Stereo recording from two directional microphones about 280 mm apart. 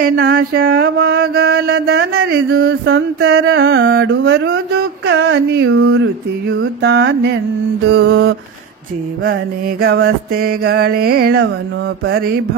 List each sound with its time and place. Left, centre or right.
0.2 s mantra: right
9.2 s mantra: right